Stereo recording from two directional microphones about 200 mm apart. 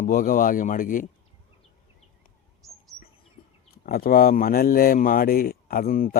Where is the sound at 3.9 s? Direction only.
45° left (ahead or behind).